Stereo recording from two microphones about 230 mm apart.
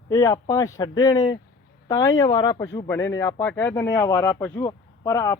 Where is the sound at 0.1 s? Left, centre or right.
Centre.